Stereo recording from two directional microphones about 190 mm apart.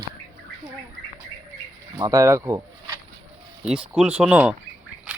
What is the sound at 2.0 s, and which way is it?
Speech, 15° right (ahead or behind).